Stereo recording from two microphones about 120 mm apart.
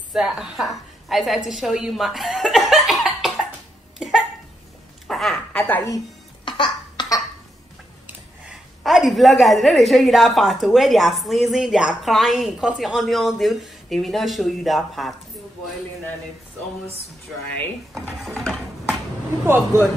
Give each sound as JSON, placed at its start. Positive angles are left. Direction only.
{"t": 0.1, "sound": "a woman's voice", "side_deg": -5}
{"t": 1.5, "sound": "cough", "side_deg": 0}
{"t": 5.0, "sound": "a sound", "side_deg": 0}
{"t": 6.4, "sound": "cough", "side_deg": 40}
{"t": 8.8, "sound": "a woman's voice", "side_deg": 0}
{"t": 18.2, "sound": "a sound", "side_deg": 5}
{"t": 19.4, "sound": "speech", "side_deg": -20}